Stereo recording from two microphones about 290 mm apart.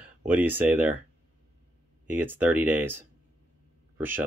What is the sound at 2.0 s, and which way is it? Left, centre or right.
Speech, centre.